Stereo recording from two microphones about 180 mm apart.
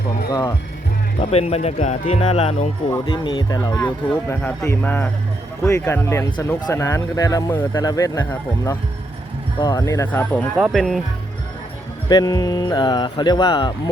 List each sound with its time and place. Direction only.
0.3 s speech: 20° left (ahead or behind)
1.2 s speech: 35° left (ahead or behind); by 10.4 s 10° left (ahead or behind)
10.6 s speech: 5° right (ahead or behind)
12.0 s speech: 20° left (ahead or behind)